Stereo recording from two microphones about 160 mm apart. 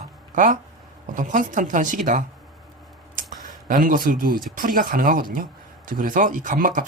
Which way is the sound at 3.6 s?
55° right (ahead or behind).